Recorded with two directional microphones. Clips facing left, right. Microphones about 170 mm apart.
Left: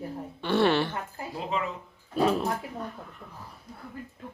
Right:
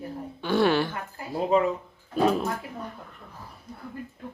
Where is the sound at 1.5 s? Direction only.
40° right (ahead or behind).